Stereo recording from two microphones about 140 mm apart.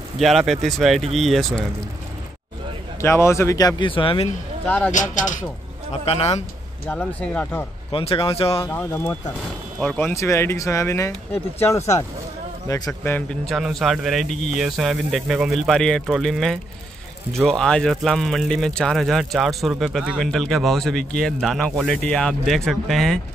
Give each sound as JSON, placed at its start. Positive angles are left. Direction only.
{"t": 0.2, "sound": "speech", "side_deg": 0}
{"t": 3.0, "sound": "speech", "side_deg": 20}
{"t": 4.6, "sound": "speech", "side_deg": 10}
{"t": 4.9, "sound": "speech", "side_deg": 65}
{"t": 5.9, "sound": "speech", "side_deg": 45}
{"t": 6.9, "sound": "speech", "side_deg": 10}
{"t": 7.9, "sound": "speech", "side_deg": 40}
{"t": 8.6, "sound": "speech", "side_deg": 15}
{"t": 12.6, "sound": "a man's voice", "side_deg": 25}
{"t": 13.0, "sound": "speech", "side_deg": 15}
{"t": 13.5, "sound": "speech", "side_deg": 0}